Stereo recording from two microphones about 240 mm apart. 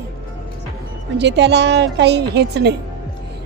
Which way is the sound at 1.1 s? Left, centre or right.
Right.